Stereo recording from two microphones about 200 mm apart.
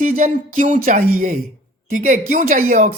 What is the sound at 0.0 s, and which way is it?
A woman's voice, 45° right (ahead or behind).